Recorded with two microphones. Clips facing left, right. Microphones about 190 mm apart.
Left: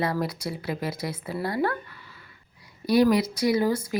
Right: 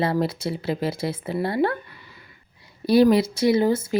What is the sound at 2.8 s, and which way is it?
Speech, 30° right (ahead or behind).